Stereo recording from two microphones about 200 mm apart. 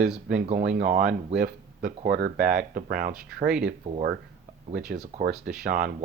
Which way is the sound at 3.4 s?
5° right (ahead or behind).